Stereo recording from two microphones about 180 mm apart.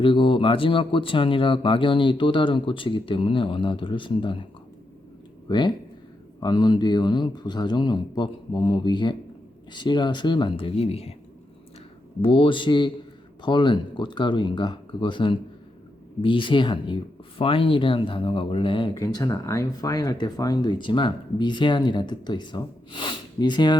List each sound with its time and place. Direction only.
0.0 s speech: 30° left (ahead or behind)
5.5 s speech: 25° left (ahead or behind)
12.2 s speech: 30° left (ahead or behind)